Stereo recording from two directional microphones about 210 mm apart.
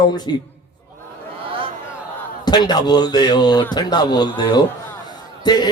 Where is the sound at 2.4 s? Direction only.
20° left (ahead or behind).